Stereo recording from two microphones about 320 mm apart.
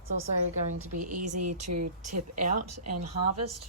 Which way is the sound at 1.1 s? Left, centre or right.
Right.